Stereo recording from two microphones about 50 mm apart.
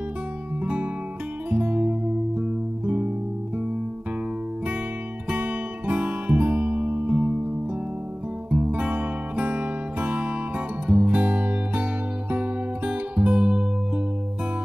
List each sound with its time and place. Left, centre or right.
1.5 s music: right
5.3 s music: right
8.5 s music: right